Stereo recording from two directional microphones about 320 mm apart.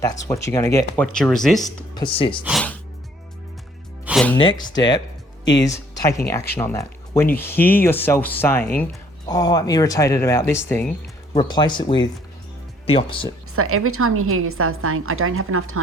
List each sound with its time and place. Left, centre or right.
0.0 s speech: centre
2.0 s speech: centre
2.4 s speech: centre
4.0 s music: centre
4.4 s speech: centre
13.6 s a woman's voice: right